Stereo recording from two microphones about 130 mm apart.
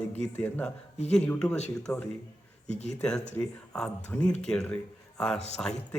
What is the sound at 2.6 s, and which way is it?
Speech, 60° left (ahead or behind).